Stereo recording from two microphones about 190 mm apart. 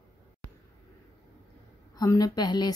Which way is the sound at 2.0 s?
20° left (ahead or behind).